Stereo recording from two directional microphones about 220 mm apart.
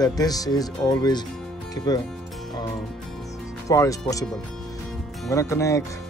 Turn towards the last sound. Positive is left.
turn(degrees=15)  # may be behind; listen again after turning